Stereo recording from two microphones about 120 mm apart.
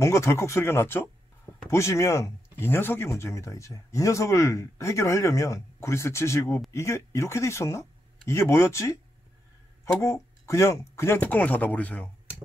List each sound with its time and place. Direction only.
0.0 s speech: 25° left (ahead or behind)